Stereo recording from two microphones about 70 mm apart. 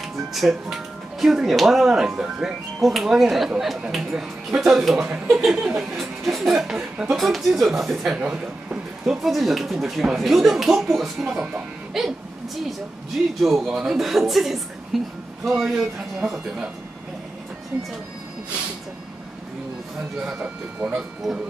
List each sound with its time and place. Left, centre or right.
0.3 s speech: centre
8.2 s speech: centre
9.2 s speech: centre
13.4 s speech: centre
20.3 s speech: right